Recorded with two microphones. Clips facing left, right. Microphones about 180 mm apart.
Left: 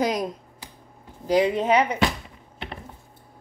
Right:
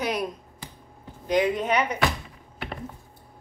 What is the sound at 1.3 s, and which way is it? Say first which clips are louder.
Speech: left 3 dB; 30° left (ahead or behind).